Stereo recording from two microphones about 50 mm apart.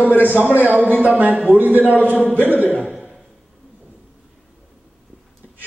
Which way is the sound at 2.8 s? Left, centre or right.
Centre.